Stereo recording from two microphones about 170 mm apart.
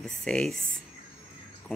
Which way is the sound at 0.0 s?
5° left (ahead or behind).